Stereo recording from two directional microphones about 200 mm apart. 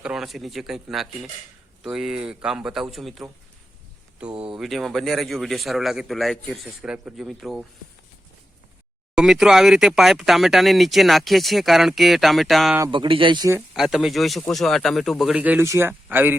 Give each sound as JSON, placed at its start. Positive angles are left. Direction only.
{"t": 0.0, "sound": "speech", "side_deg": 0}
{"t": 4.5, "sound": "speech", "side_deg": 0}
{"t": 9.1, "sound": "speech", "side_deg": 0}
{"t": 12.8, "sound": "speech", "side_deg": -25}
{"t": 13.7, "sound": "speech", "side_deg": 0}